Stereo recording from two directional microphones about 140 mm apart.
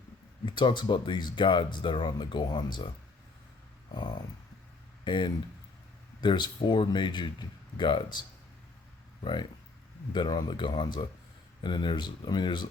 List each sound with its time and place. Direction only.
0.4 s speech: 35° left (ahead or behind)
5.0 s speech: 35° left (ahead or behind)
9.2 s speech: 35° left (ahead or behind)